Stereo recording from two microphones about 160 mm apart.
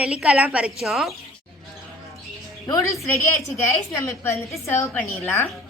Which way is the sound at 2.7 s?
20° left (ahead or behind).